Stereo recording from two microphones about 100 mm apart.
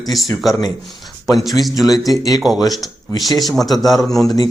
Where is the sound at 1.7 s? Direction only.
40° left (ahead or behind).